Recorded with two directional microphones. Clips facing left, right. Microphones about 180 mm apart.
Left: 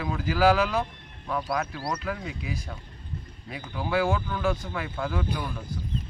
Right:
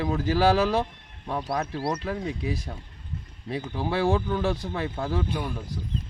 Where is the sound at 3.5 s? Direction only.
30° right (ahead or behind).